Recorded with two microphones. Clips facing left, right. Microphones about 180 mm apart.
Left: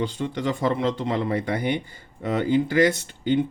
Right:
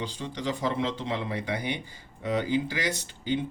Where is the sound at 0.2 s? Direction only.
55° left (ahead or behind).